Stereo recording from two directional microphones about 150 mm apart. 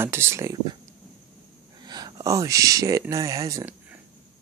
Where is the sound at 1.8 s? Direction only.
30° right (ahead or behind).